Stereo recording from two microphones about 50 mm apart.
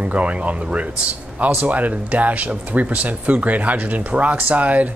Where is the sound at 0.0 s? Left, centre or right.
Right.